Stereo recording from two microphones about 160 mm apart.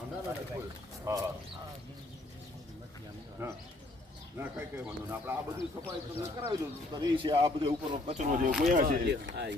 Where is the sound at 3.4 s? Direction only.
15° right (ahead or behind).